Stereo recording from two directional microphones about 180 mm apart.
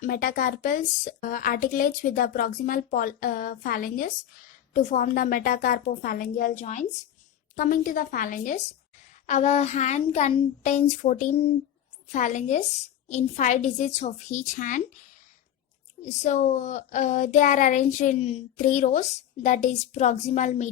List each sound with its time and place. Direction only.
0.0 s a woman's voice: 50° left (ahead or behind)
16.0 s speech: 40° left (ahead or behind)